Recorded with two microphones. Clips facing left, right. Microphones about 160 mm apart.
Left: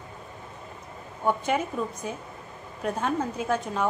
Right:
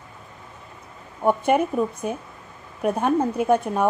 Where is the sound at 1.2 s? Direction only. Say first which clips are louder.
Right 6 dB; 60° right (ahead or behind).